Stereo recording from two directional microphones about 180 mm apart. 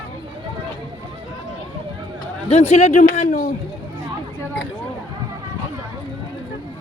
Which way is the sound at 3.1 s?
50° left (ahead or behind).